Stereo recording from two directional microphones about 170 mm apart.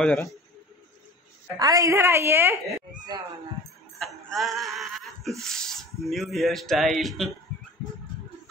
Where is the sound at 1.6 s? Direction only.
20° right (ahead or behind).